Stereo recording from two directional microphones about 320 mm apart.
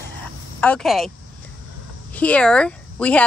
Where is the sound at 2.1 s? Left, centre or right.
Centre.